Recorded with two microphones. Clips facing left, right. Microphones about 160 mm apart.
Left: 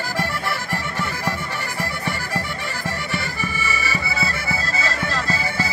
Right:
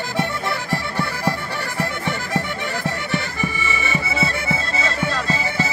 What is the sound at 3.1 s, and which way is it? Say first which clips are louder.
Music: right 3 dB; 20° right (ahead or behind).